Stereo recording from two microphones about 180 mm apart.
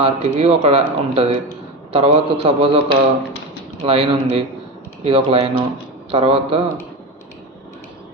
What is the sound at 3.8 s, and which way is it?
Speech, 30° right (ahead or behind).